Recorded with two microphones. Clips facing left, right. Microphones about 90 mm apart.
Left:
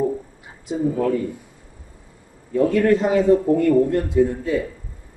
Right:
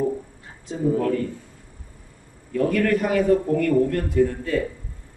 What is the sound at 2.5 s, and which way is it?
A man's voice, 20° left (ahead or behind).